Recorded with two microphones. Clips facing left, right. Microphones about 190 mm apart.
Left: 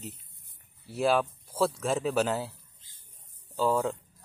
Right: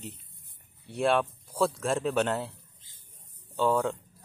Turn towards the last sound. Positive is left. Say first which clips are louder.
# right 1 dB
turn(degrees=0)  # may be behind; listen again after turning